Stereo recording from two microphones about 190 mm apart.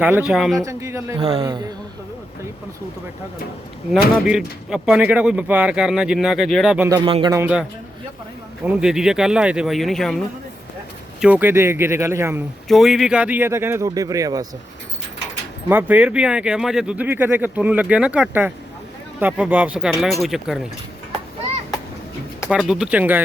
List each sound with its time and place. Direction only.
0.0 s speech: 5° right (ahead or behind)
0.6 s speech: 15° right (ahead or behind)
1.2 s speech: 30° right (ahead or behind)
1.5 s speech: 20° right (ahead or behind)
4.3 s speech: 5° right (ahead or behind)
6.8 s speech: 20° right (ahead or behind)
7.3 s speech: 5° right (ahead or behind)
11.2 s speech: 10° right (ahead or behind)
12.6 s speech: centre (ahead or behind); by 14.4 s 20° right (ahead or behind)
15.7 s speech: 5° right (ahead or behind)
22.4 s speech: centre (ahead or behind)